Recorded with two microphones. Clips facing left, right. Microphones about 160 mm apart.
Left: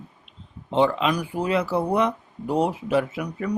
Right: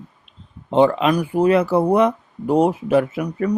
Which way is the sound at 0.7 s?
50° right (ahead or behind).